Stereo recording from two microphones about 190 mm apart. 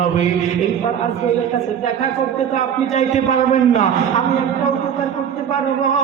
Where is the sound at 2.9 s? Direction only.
40° left (ahead or behind).